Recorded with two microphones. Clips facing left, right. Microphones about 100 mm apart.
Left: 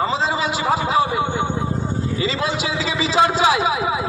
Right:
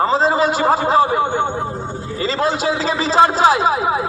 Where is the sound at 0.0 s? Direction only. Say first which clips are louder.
Right 5 dB; 40° right (ahead or behind).